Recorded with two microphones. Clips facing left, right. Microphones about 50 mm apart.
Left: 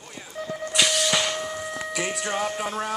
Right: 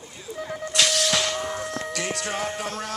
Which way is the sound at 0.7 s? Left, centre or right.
Centre.